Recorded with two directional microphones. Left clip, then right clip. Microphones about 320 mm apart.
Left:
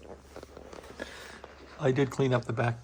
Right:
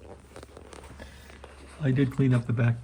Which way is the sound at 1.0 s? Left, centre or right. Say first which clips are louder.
Left 7 dB; left.